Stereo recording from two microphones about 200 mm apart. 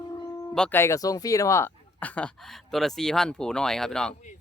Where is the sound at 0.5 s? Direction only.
10° left (ahead or behind).